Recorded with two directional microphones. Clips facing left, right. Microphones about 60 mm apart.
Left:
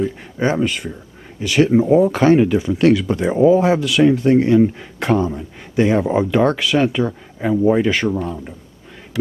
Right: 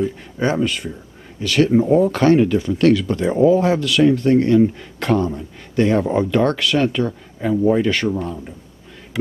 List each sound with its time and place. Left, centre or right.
0.4 s speech: centre